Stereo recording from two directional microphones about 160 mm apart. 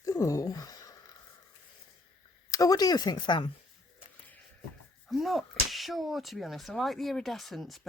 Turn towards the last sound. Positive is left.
turn(degrees=0)  # may be behind; listen again after turning